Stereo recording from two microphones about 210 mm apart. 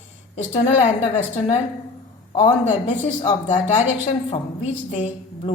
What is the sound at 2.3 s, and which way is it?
A woman's voice, 25° left (ahead or behind).